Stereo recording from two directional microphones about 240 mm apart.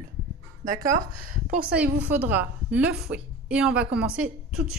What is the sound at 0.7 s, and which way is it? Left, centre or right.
Speech, right.